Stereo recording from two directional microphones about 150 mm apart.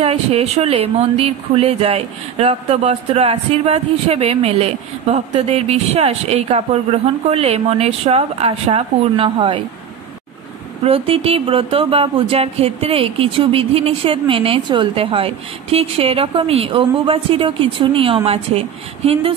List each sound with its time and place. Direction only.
0.0 s speech: 45° right (ahead or behind)
10.8 s speech: 40° right (ahead or behind)